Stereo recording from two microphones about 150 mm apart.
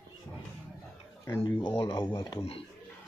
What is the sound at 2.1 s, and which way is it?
Speech, 35° left (ahead or behind).